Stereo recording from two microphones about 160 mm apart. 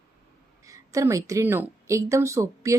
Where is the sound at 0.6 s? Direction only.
20° right (ahead or behind).